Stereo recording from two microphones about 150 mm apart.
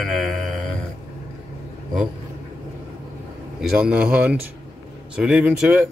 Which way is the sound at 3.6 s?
5° right (ahead or behind).